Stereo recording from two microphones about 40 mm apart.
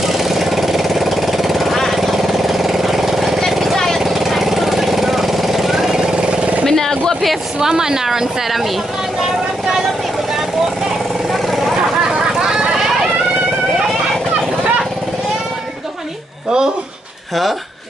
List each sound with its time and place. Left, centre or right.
0.0 s vehicle: centre
4.0 s vehicle: centre
5.9 s vehicle: right
6.6 s vehicle: centre
7.6 s a woman's voice: centre